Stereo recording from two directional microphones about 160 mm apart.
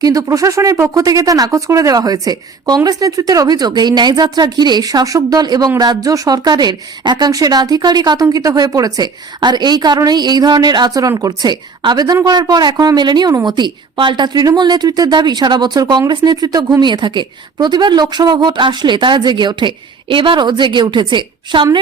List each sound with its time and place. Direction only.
0.0 s speech: 20° right (ahead or behind)